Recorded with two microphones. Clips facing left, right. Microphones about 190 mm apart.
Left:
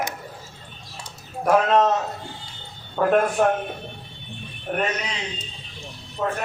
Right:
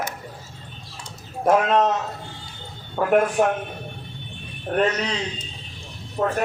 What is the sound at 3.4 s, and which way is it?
Speech, 15° right (ahead or behind).